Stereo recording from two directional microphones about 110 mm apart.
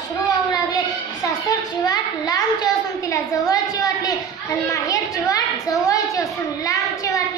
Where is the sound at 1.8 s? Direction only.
35° left (ahead or behind).